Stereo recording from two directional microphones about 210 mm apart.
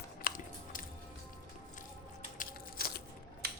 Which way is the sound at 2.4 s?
45° left (ahead or behind).